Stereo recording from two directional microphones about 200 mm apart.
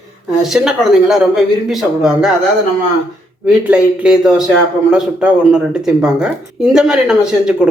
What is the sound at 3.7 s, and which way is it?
Speech, 5° right (ahead or behind).